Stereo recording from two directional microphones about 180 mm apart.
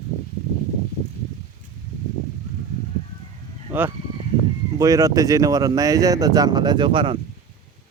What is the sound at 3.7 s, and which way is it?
Speech, 10° right (ahead or behind).